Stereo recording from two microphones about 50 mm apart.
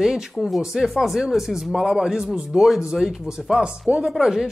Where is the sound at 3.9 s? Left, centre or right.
Right.